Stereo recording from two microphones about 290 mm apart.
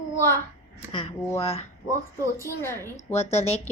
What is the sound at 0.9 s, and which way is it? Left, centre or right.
Speech, centre.